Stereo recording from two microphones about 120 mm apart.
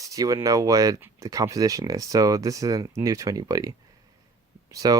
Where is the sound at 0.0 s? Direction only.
30° right (ahead or behind).